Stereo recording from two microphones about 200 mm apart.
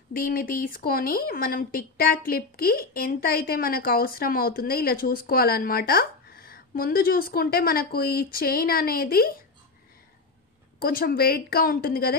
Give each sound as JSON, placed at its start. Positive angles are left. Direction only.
{"t": 0.1, "sound": "speech", "side_deg": 45}
{"t": 10.8, "sound": "speech", "side_deg": 45}